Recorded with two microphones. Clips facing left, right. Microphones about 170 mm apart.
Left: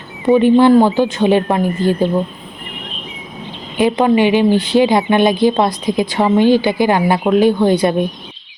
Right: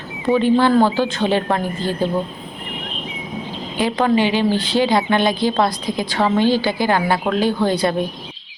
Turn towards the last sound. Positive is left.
turn(degrees=20)  # may be behind; listen again after turning